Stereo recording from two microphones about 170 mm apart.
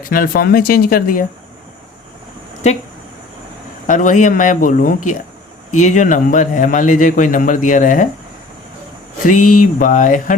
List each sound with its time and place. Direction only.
0.1 s speech: 60° left (ahead or behind)
3.8 s a man's voice: 50° left (ahead or behind)
9.2 s a man's voice: 50° left (ahead or behind)